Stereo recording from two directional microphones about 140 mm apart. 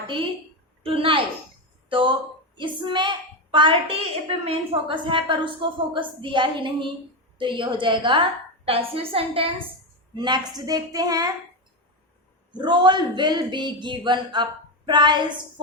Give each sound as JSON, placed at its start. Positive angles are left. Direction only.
{"t": 0.8, "sound": "a woman's voice", "side_deg": -40}
{"t": 10.2, "sound": "a woman's voice", "side_deg": -30}
{"t": 12.5, "sound": "a woman's voice", "side_deg": -35}